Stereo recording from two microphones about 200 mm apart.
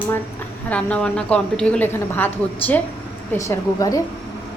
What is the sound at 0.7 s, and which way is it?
A woman's voice, 5° left (ahead or behind).